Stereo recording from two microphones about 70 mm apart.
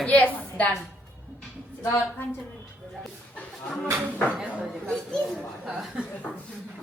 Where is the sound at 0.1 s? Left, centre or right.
Centre.